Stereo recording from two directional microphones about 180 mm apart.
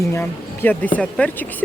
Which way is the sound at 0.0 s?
10° left (ahead or behind).